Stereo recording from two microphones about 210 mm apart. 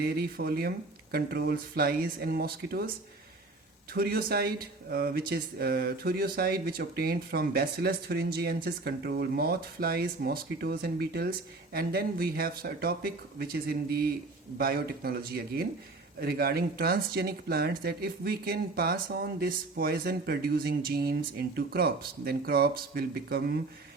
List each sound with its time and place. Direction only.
0.0 s speech: 45° right (ahead or behind)
3.9 s speech: 45° right (ahead or behind)